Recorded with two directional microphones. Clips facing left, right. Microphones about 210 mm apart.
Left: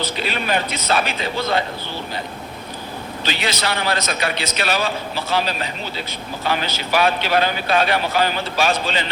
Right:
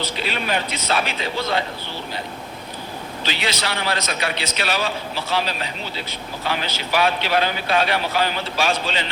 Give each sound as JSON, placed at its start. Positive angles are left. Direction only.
{"t": 0.0, "sound": "speech", "side_deg": 45}
{"t": 3.2, "sound": "speech", "side_deg": 45}